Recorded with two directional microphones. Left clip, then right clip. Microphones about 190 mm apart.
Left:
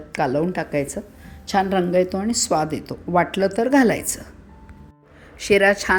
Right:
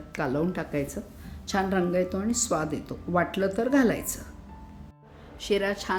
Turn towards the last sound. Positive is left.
turn(degrees=35)  # may be behind; listen again after turning